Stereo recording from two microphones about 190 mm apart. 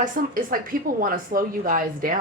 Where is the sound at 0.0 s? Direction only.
45° right (ahead or behind).